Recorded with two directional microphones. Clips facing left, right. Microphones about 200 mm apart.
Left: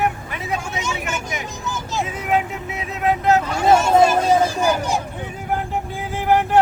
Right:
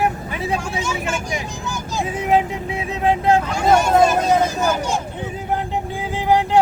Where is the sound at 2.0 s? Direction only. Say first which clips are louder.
Right 5 dB; 30° right (ahead or behind).